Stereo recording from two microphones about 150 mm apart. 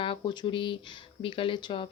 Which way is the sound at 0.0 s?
35° left (ahead or behind).